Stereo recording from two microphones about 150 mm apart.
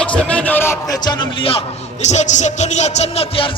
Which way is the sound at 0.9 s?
30° left (ahead or behind).